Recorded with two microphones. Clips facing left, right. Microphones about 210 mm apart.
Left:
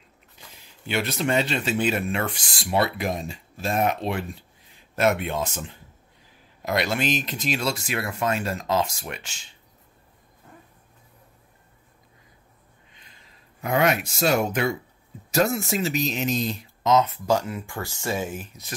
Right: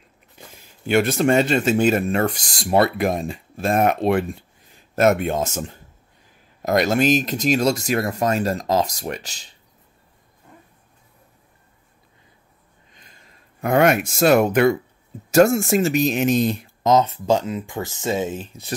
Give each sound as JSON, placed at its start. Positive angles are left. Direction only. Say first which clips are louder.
{"t": 0.4, "sound": "speech", "louder": "right 7 dB", "side_deg": -50}
{"t": 12.9, "sound": "speech", "louder": "right 5 dB", "side_deg": -45}
{"t": 15.3, "sound": "speech", "louder": "right 8 dB", "side_deg": -50}
{"t": 16.9, "sound": "speech", "louder": "right 3 dB", "side_deg": -30}